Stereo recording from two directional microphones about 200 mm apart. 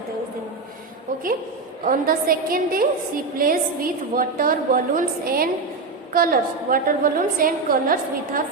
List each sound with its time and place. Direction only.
1.8 s a woman's voice: 45° right (ahead or behind)